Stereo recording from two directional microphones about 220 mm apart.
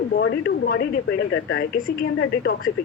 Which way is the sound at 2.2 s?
65° left (ahead or behind).